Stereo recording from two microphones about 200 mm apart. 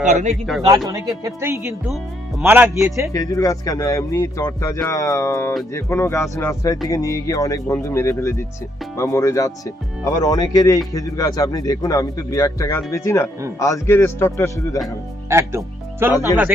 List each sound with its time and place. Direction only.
0.0 s speech: 35° right (ahead or behind)
0.9 s speech: 15° right (ahead or behind)
3.1 s speech: 15° left (ahead or behind)
15.3 s speech: 15° right (ahead or behind)